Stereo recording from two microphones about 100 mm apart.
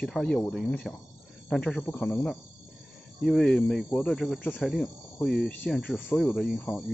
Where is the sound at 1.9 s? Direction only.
20° left (ahead or behind).